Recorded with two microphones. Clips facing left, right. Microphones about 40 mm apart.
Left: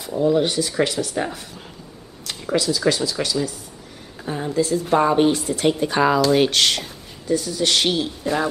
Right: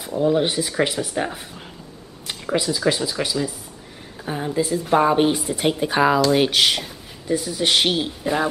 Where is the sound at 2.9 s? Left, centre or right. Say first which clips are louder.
Left 1 dB; centre.